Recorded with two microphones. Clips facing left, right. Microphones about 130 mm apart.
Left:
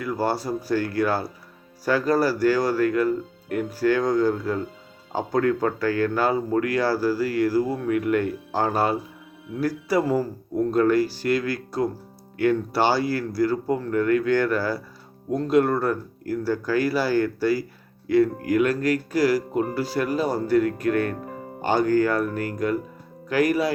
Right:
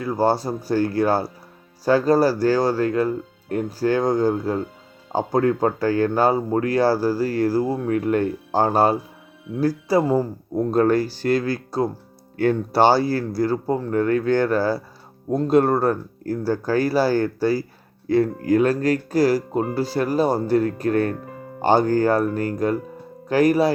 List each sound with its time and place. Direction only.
0.0 s speech: 25° right (ahead or behind)
10.7 s speech: 35° right (ahead or behind)